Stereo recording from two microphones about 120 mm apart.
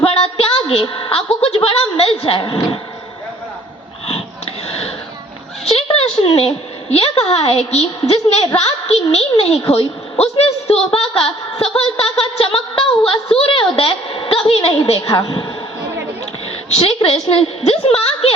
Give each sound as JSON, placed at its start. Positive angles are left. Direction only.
{"t": 0.0, "sound": "a sound", "side_deg": 55}
{"t": 2.4, "sound": "a woman's voice", "side_deg": 40}
{"t": 4.0, "sound": "sniff", "side_deg": 55}
{"t": 5.6, "sound": "a sound", "side_deg": 55}
{"t": 6.9, "sound": "a woman's voice", "side_deg": 60}
{"t": 15.1, "sound": "a woman's voice", "side_deg": 40}
{"t": 16.6, "sound": "a woman's voice", "side_deg": 60}